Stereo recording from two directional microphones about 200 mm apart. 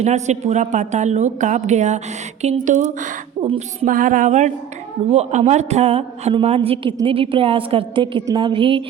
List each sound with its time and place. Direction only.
0.0 s a woman's voice: 35° right (ahead or behind)